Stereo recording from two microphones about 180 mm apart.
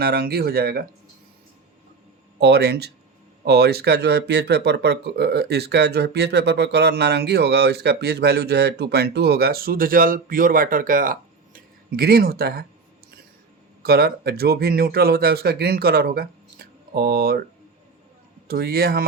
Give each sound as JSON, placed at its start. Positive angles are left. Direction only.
{"t": 0.0, "sound": "speech", "side_deg": -60}
{"t": 2.4, "sound": "speech", "side_deg": -65}
{"t": 13.8, "sound": "speech", "side_deg": -60}
{"t": 18.4, "sound": "speech", "side_deg": -60}